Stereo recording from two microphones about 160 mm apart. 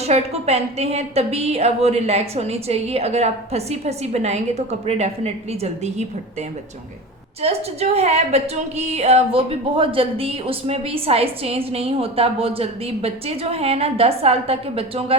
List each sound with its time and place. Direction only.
0.0 s a woman's voice: 40° right (ahead or behind)
7.4 s a woman's voice: 40° right (ahead or behind)